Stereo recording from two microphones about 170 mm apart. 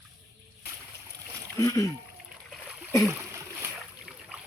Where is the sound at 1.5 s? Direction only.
20° left (ahead or behind).